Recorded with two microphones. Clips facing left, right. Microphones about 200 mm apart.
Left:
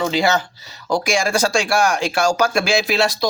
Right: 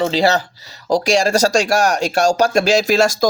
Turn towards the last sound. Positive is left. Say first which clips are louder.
# right 4 dB
turn(degrees=-45)  # may be behind; listen again after turning